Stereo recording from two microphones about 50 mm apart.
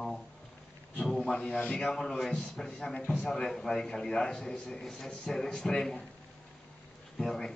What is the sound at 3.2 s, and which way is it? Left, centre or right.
Speech, centre.